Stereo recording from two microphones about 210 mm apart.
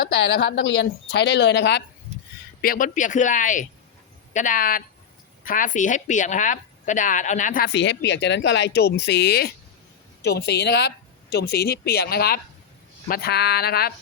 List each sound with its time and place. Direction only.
0.0 s a woman's voice: 50° left (ahead or behind)
2.6 s a woman's voice: 40° left (ahead or behind)